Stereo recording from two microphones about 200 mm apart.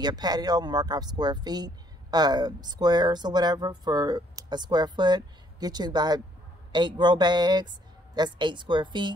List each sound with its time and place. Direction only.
0.0 s speech: 20° right (ahead or behind)